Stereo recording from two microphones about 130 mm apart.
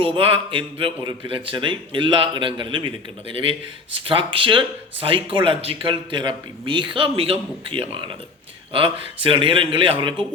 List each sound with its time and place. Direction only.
0.0 s speech: 45° right (ahead or behind)